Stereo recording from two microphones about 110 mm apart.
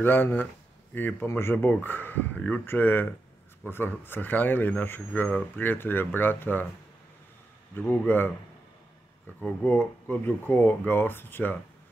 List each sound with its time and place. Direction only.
0.0 s speech: 20° left (ahead or behind)
7.7 s speech: 15° left (ahead or behind)
9.4 s speech: 15° left (ahead or behind)